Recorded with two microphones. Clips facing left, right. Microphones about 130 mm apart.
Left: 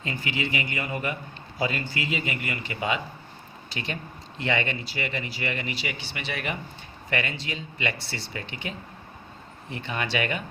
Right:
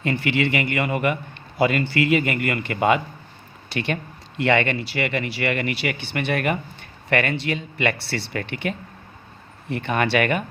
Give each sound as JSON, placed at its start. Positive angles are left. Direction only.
{"t": 0.0, "sound": "a man's voice", "side_deg": -65}